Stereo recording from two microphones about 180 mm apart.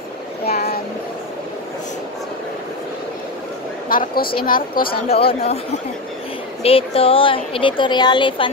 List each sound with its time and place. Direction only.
0.5 s a sound: 60° left (ahead or behind)
3.9 s a woman's voice: 55° left (ahead or behind)
5.1 s speech: 35° left (ahead or behind)
6.6 s a woman's voice: 30° left (ahead or behind)